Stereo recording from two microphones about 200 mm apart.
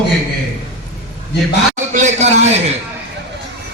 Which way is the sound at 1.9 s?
35° right (ahead or behind).